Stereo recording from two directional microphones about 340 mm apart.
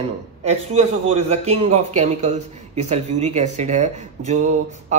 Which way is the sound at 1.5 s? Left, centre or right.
Centre.